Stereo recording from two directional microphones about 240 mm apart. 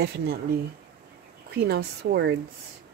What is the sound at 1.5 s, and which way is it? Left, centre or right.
Speech, right.